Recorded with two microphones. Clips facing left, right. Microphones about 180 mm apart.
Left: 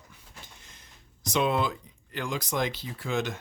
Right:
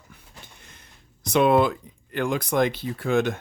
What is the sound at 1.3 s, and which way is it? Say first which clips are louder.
Speech: right 8 dB; 60° right (ahead or behind).